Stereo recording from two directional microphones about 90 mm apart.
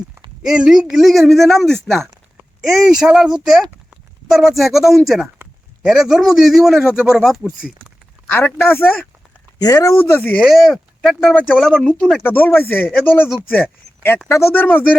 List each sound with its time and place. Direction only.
0.4 s speech: 5° right (ahead or behind)
7.4 s speech: 15° right (ahead or behind)
8.3 s speech: 20° left (ahead or behind)
9.6 s speech: 45° left (ahead or behind)
9.9 s speech: 20° left (ahead or behind)
10.4 s speech: centre (ahead or behind)
11.3 s speech: 10° left (ahead or behind)
12.2 s speech: 20° left (ahead or behind)